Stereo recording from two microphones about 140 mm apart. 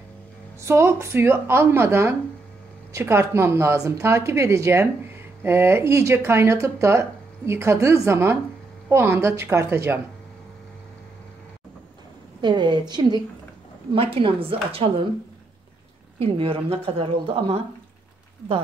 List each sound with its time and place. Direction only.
0.6 s speech: 20° right (ahead or behind)
12.4 s a woman's voice: 35° right (ahead or behind)
13.9 s a woman's voice: 40° right (ahead or behind)
16.2 s a woman's voice: 40° right (ahead or behind)